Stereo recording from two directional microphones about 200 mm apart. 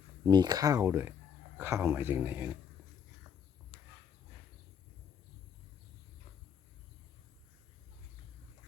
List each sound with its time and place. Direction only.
0.3 s speech: 20° right (ahead or behind)